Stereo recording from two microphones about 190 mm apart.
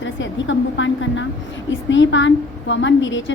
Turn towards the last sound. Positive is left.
turn(degrees=75)  # may be behind; listen again after turning